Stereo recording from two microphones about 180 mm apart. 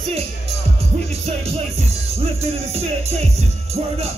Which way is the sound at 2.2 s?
35° right (ahead or behind).